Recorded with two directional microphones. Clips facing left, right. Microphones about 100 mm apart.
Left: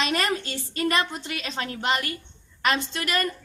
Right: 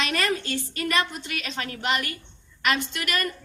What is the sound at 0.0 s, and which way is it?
A woman's voice, 25° left (ahead or behind).